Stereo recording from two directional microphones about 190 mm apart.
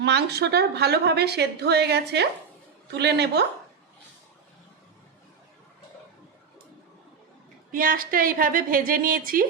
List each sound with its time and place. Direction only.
0.0 s a woman's voice: 60° right (ahead or behind)
7.7 s a woman's voice: 50° right (ahead or behind)